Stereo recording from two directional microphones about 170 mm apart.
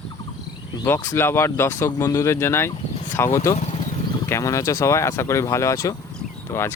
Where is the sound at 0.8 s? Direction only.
15° left (ahead or behind).